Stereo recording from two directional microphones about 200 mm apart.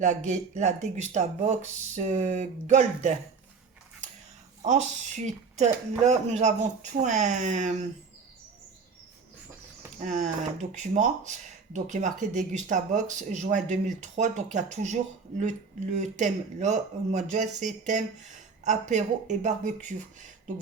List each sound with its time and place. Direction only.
0.0 s speech: 35° right (ahead or behind)
4.6 s speech: 35° right (ahead or behind)
10.0 s speech: 40° right (ahead or behind)